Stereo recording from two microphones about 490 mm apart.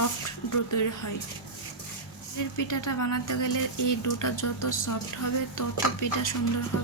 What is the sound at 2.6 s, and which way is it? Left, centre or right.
Speech, left.